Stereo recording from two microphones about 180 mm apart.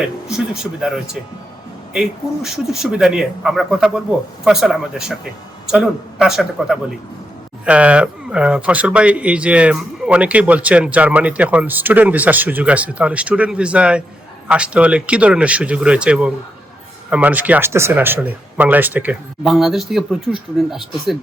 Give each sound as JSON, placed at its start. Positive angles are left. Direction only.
{"t": 0.3, "sound": "a man's voice", "side_deg": -5}